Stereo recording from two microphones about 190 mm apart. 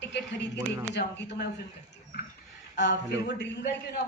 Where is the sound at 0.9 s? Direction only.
65° left (ahead or behind).